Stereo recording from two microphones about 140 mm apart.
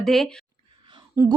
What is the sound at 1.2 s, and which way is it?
Speech, 20° right (ahead or behind).